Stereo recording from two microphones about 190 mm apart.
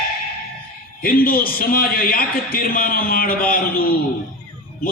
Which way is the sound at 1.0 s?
50° left (ahead or behind).